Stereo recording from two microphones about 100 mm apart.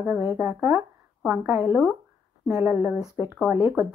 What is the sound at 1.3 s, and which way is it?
Speech, 15° right (ahead or behind).